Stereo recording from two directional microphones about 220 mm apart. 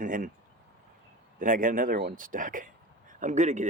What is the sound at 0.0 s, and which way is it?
Speech, 35° right (ahead or behind).